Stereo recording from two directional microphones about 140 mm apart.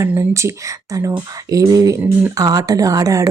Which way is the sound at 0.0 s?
20° right (ahead or behind).